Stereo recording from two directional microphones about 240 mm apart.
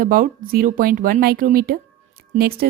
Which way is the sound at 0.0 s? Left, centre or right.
Right.